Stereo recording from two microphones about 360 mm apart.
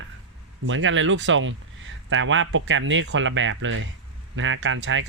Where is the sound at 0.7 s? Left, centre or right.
Right.